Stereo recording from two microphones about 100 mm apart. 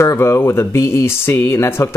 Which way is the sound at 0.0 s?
30° left (ahead or behind).